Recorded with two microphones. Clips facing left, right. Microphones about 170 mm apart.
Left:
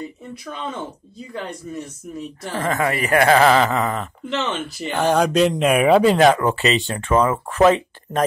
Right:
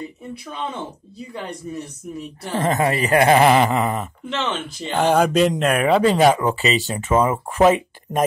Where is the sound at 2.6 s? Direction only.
20° right (ahead or behind).